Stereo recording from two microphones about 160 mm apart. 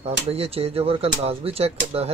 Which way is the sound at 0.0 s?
40° right (ahead or behind).